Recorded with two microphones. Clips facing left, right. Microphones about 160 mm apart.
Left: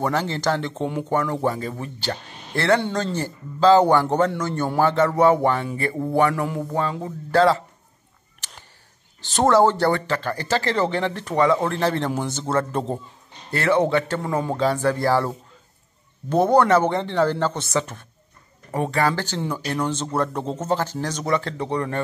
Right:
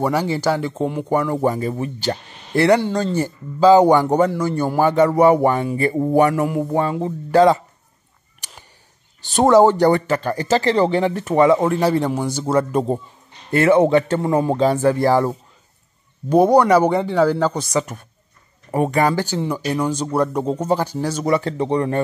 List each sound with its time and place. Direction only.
0.0 s speech: 10° right (ahead or behind)
8.4 s a sound: 15° right (ahead or behind)
9.3 s speech: 15° right (ahead or behind)
14.3 s speech: 35° right (ahead or behind)
14.6 s speech: 15° right (ahead or behind)